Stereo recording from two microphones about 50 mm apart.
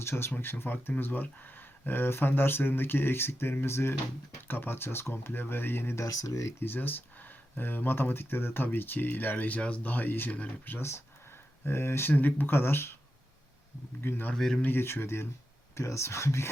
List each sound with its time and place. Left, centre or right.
0.0 s speech: left
6.0 s speech: left
6.6 s speech: left
9.6 s speech: left
10.7 s speech: left
12.1 s speech: left
14.0 s speech: left
14.3 s speech: centre
14.6 s speech: left
15.7 s speech: left